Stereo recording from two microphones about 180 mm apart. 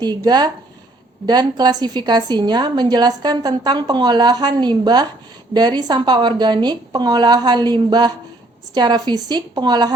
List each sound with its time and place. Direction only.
0.3 s a woman's voice: 25° right (ahead or behind)